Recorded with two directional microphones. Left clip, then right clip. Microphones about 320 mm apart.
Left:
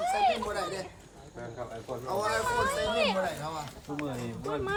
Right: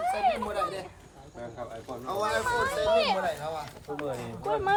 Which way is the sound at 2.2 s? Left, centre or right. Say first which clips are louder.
Right 2 dB; right.